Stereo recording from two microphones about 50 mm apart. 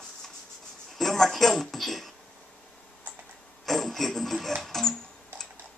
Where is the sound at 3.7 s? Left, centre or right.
Centre.